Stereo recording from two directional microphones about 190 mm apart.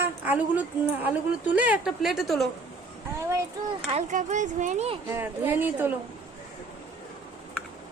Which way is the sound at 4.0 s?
40° right (ahead or behind).